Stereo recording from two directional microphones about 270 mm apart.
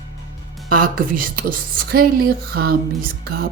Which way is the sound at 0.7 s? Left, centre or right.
Right.